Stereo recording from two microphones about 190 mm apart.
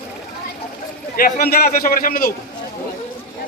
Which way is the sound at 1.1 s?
50° left (ahead or behind).